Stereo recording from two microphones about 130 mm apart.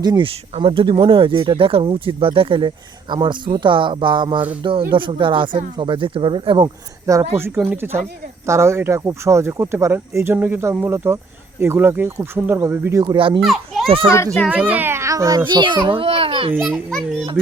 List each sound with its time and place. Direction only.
0.0 s speech: 30° right (ahead or behind)
0.3 s speech: 45° right (ahead or behind)
7.1 s speech: 20° right (ahead or behind)
13.1 s speech: 40° right (ahead or behind)
13.4 s a child's voice: centre (ahead or behind)
13.8 s a child's voice: 45° right (ahead or behind)
14.5 s speech: 15° right (ahead or behind)
15.4 s speech: 35° right (ahead or behind)
16.6 s a child's voice: centre (ahead or behind)